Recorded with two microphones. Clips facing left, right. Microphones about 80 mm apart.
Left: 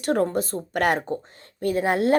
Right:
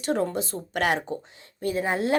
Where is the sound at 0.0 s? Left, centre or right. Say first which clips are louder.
Left 3 dB; left.